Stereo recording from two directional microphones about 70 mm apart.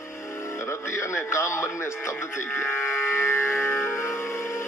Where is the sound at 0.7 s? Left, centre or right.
Left.